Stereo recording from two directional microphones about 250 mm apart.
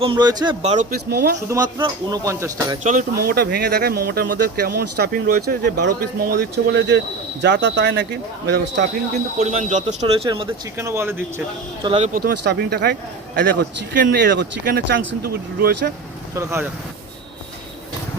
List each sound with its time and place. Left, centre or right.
0.0 s speech: centre; by 1.4 s right
1.5 s speech: centre
2.8 s speech: right
9.1 s speech: right; by 11.9 s centre
11.9 s speech: right
16.3 s speech: centre